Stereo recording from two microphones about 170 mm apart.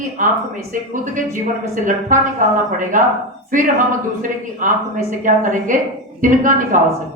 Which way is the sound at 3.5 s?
50° right (ahead or behind).